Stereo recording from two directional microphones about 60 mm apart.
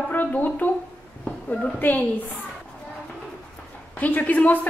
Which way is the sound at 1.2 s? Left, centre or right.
Centre.